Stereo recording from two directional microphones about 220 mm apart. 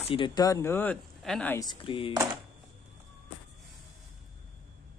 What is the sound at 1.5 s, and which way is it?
Speech, 20° left (ahead or behind).